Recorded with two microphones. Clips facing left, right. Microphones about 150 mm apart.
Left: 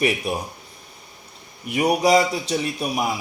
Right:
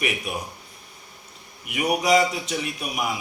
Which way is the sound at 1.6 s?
35° left (ahead or behind).